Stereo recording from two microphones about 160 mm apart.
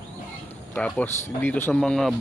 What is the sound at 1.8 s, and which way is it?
Speech, centre (ahead or behind).